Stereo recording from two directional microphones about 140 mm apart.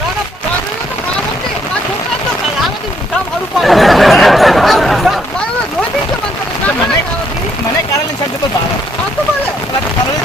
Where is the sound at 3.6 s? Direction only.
Centre (ahead or behind).